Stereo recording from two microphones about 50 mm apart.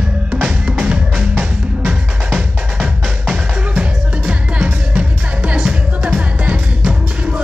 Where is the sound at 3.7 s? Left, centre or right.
Right.